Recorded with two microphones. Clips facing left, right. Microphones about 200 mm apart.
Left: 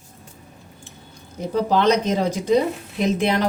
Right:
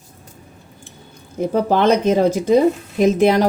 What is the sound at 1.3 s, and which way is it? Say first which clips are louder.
Speech: right 3 dB; 55° right (ahead or behind).